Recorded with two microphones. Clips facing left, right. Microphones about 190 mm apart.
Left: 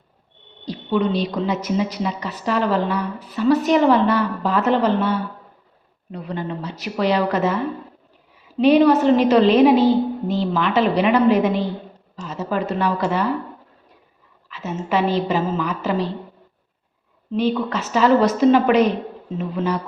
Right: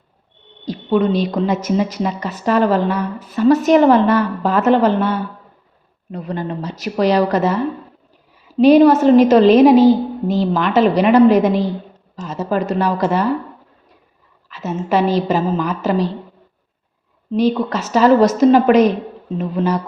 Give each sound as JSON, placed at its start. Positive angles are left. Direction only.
{"t": 0.6, "sound": "a woman's voice", "side_deg": -50}
{"t": 6.1, "sound": "a woman's voice", "side_deg": -45}
{"t": 8.6, "sound": "a woman's voice", "side_deg": -40}
{"t": 14.5, "sound": "a woman's voice", "side_deg": -40}
{"t": 17.3, "sound": "a woman's voice", "side_deg": -40}